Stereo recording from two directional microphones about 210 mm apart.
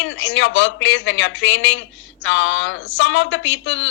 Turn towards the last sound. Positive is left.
turn(degrees=60)  # may be behind; listen again after turning